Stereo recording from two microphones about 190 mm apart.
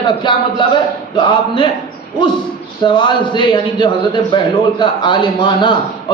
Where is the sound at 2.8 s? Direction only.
25° left (ahead or behind).